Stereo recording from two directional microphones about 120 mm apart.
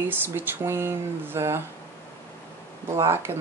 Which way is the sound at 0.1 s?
20° right (ahead or behind).